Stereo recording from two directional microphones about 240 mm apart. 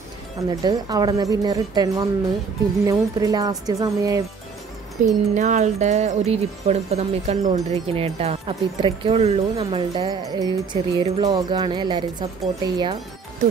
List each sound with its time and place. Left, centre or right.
0.5 s speech: centre
5.0 s speech: right